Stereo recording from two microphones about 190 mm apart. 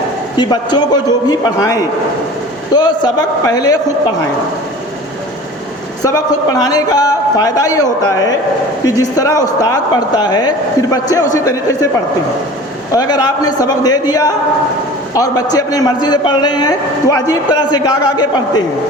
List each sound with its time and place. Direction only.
0.3 s a man's voice: 20° left (ahead or behind)
6.0 s a man's voice: 20° left (ahead or behind)
12.9 s a man's voice: 20° left (ahead or behind)